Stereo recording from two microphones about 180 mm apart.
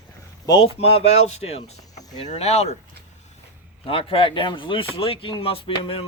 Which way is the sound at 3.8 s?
30° left (ahead or behind).